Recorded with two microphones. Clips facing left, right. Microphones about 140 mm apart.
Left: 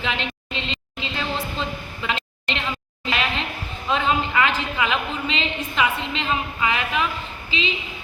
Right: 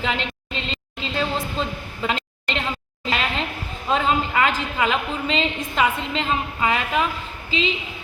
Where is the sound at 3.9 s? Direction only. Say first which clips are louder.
Right 1 dB; 40° right (ahead or behind).